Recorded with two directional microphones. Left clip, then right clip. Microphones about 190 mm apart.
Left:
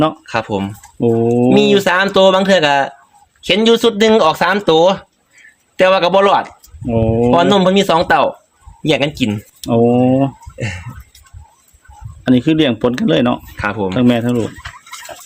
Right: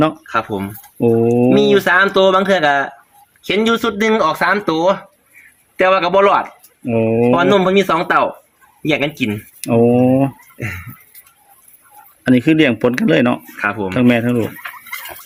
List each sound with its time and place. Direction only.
0.3 s speech: 60° left (ahead or behind)
0.9 s speech: centre (ahead or behind)
1.5 s speech: 60° left (ahead or behind)
6.8 s speech: 5° left (ahead or behind)
7.3 s speech: 55° left (ahead or behind)
9.6 s speech: 5° left (ahead or behind)
12.2 s speech: centre (ahead or behind)
13.6 s speech: 55° left (ahead or behind)
13.9 s speech: centre (ahead or behind)